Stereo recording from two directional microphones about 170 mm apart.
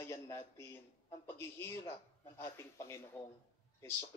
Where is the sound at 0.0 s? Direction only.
15° left (ahead or behind).